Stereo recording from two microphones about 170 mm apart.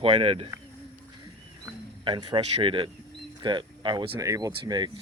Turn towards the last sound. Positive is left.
turn(degrees=-25)  # may be behind; listen again after turning